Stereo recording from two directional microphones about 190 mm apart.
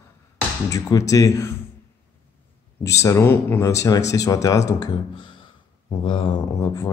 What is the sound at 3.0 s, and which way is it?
Speech, 15° left (ahead or behind).